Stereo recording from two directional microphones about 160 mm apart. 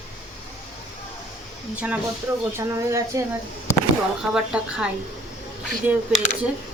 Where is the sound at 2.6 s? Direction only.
20° right (ahead or behind).